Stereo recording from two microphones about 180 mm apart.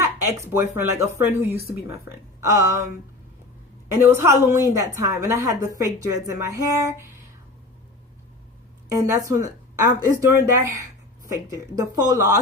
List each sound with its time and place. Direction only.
0.0 s a woman's voice: 15° right (ahead or behind)
4.1 s a woman's voice: 15° right (ahead or behind)
8.9 s a woman's voice: 15° right (ahead or behind)